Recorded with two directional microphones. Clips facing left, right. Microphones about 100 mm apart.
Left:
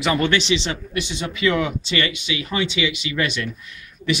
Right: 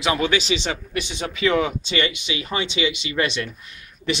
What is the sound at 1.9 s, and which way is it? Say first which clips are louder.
Speech: even; 25° right (ahead or behind).